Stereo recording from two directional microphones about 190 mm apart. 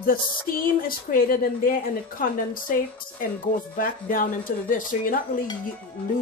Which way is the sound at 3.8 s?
45° left (ahead or behind).